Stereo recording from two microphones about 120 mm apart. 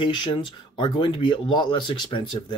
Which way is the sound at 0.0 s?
40° left (ahead or behind).